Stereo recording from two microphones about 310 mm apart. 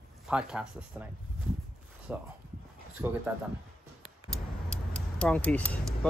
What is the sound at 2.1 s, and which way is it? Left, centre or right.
Speech, centre.